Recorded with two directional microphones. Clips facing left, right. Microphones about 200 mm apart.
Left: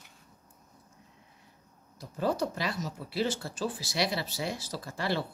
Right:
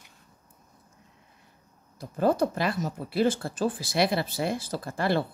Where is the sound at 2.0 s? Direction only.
55° right (ahead or behind).